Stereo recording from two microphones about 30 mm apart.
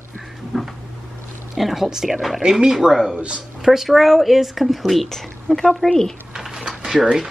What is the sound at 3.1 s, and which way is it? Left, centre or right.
Speech, right.